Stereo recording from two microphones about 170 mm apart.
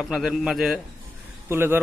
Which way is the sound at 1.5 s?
15° right (ahead or behind).